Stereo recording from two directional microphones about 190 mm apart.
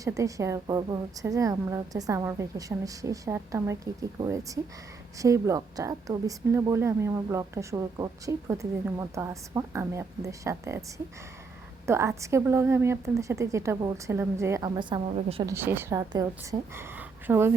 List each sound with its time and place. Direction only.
0.0 s a woman's voice: 15° right (ahead or behind)
15.5 s a woman's voice: 10° right (ahead or behind)